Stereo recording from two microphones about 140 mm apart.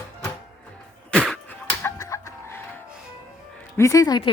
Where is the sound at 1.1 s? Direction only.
5° left (ahead or behind).